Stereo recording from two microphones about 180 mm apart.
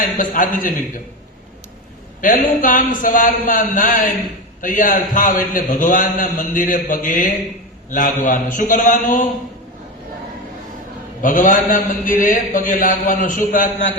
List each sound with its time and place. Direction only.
0.0 s a man's voice: 45° left (ahead or behind)
2.2 s a man's voice: 45° left (ahead or behind)
11.2 s a man's voice: 45° left (ahead or behind)